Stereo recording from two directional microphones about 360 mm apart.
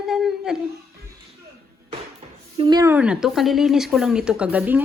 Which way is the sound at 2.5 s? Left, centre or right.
Centre.